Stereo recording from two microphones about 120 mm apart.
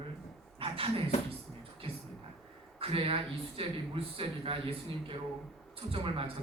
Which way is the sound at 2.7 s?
50° right (ahead or behind).